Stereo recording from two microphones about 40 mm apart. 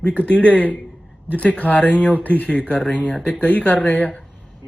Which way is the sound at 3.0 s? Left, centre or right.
Left.